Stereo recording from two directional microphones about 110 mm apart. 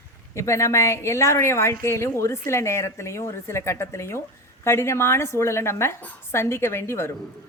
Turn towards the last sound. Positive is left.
turn(degrees=25)  # may be behind; listen again after turning